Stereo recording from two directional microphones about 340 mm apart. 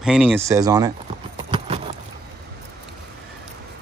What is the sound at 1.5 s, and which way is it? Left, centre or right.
Keys jangling, centre.